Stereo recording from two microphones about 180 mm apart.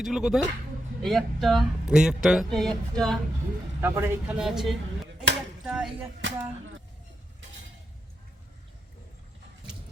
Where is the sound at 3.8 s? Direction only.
15° right (ahead or behind).